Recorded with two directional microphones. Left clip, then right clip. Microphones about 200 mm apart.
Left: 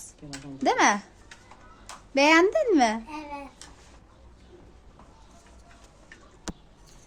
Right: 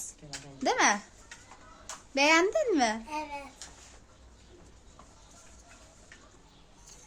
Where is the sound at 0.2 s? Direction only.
50° left (ahead or behind).